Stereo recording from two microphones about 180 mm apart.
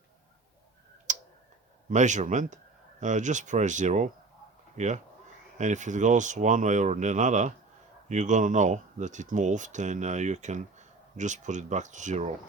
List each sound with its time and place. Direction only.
1.1 s tick-tock: 45° right (ahead or behind)
1.9 s speech: 40° right (ahead or behind)